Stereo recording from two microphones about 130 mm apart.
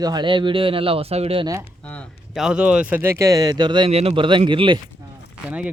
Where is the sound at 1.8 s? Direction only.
10° left (ahead or behind).